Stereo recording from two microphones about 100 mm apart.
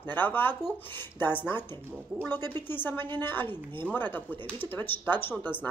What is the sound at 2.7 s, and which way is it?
Speech, 20° left (ahead or behind).